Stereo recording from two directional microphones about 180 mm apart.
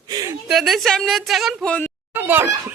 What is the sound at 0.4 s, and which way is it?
A woman's voice, centre (ahead or behind).